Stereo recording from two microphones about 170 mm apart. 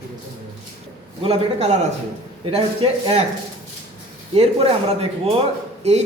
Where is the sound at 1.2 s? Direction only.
35° right (ahead or behind).